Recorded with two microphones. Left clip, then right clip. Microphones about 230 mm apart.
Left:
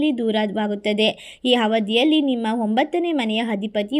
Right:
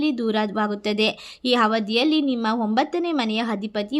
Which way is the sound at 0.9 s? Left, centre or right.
Right.